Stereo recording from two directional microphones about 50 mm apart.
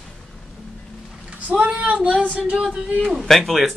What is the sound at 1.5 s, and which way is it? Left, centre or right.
Child singing, right.